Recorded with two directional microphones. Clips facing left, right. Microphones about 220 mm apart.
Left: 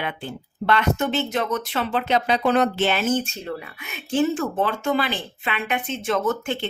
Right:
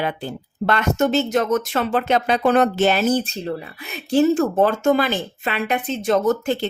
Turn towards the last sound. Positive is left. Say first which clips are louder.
# right 5 dB
turn(degrees=-40)  # may be behind; listen again after turning